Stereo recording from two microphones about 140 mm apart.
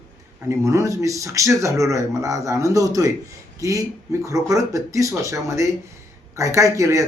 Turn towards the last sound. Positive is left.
turn(degrees=-20)  # may be behind; listen again after turning